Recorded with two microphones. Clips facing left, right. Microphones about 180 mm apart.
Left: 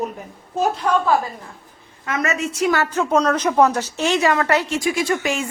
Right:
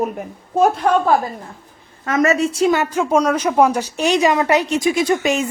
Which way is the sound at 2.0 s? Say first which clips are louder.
Right 7 dB; 40° right (ahead or behind).